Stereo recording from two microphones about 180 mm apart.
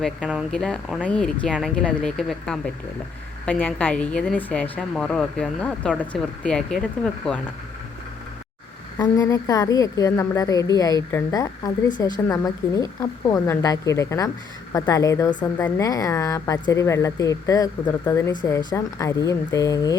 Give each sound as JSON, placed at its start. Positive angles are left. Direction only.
{"t": 0.0, "sound": "a woman's voice", "side_deg": -5}
{"t": 9.0, "sound": "a woman's voice", "side_deg": 20}